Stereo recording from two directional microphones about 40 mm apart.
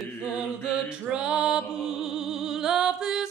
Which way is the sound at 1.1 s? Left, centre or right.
Right.